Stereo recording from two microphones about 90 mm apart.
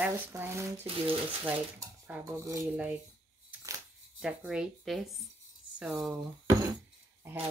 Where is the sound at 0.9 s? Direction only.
90° right.